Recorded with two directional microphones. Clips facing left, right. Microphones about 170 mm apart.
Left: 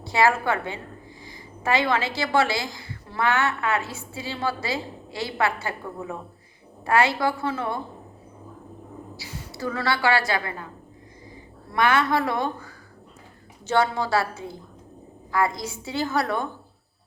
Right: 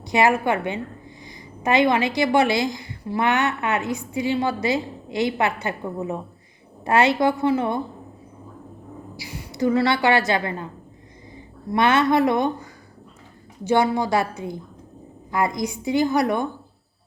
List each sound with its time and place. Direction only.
0.0 s a woman's voice: 20° right (ahead or behind)
9.1 s a woman's voice: 15° right (ahead or behind)
11.7 s a woman's voice: 20° right (ahead or behind)